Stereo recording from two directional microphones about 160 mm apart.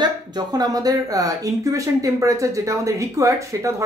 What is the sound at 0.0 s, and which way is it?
Speech, 25° right (ahead or behind).